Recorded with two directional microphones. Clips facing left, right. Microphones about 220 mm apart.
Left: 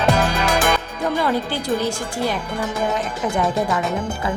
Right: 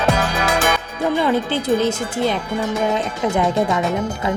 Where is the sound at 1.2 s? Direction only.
20° right (ahead or behind).